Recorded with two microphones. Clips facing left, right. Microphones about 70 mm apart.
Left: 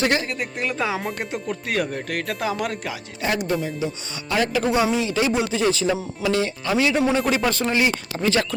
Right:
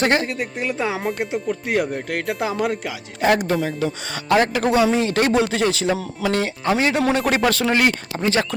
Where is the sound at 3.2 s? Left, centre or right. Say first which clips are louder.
Right 5 dB; right.